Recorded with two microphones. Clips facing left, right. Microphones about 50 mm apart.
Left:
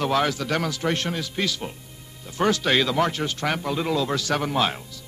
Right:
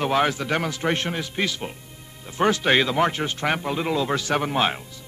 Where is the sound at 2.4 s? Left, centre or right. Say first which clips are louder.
Right 2 dB; right.